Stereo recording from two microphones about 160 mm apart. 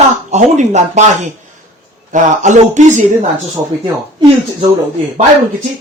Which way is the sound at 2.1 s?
50° right (ahead or behind).